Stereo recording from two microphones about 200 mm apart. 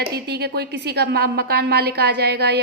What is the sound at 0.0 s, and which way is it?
A woman's voice, 55° right (ahead or behind).